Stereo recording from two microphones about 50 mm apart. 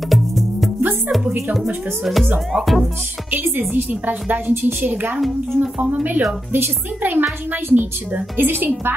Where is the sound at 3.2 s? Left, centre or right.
Right.